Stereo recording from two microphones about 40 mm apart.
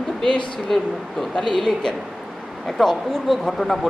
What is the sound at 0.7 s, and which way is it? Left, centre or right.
Speech, centre.